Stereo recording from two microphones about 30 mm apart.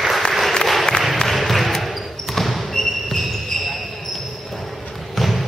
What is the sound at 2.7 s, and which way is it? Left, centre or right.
Basketball bounce, centre.